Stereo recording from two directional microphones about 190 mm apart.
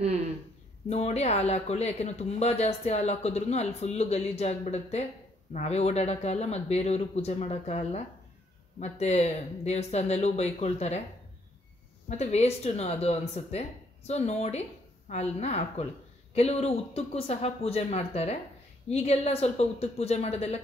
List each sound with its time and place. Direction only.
0.8 s speech: 35° left (ahead or behind)
12.1 s speech: 35° left (ahead or behind)